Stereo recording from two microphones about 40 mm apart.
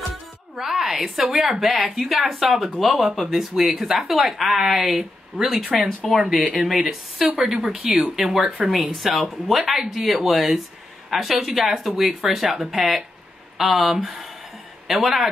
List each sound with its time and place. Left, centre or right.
0.6 s a woman's voice: centre
8.4 s speech: right
8.9 s a woman's voice: centre